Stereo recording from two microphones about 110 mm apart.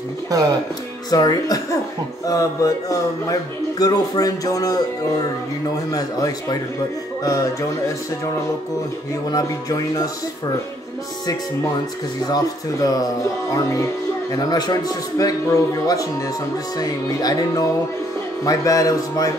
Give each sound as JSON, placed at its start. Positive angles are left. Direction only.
{"t": 0.3, "sound": "speech", "side_deg": -35}
{"t": 1.1, "sound": "speech", "side_deg": 35}
{"t": 5.9, "sound": "speech", "side_deg": 35}
{"t": 9.3, "sound": "speech", "side_deg": 35}
{"t": 12.8, "sound": "speech", "side_deg": 35}